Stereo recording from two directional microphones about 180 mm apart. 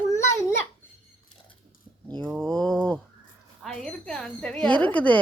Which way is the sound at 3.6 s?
5° left (ahead or behind).